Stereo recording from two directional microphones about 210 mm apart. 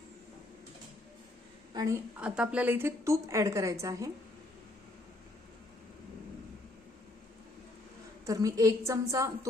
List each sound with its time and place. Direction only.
1.7 s a woman's voice: 15° right (ahead or behind)
8.3 s a woman's voice: 15° right (ahead or behind)